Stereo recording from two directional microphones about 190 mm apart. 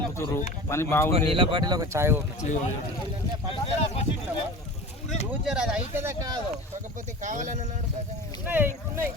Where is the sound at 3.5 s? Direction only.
30° left (ahead or behind).